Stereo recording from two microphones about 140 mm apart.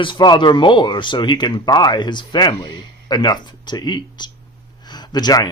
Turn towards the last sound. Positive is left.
turn(degrees=30)  # may be behind; listen again after turning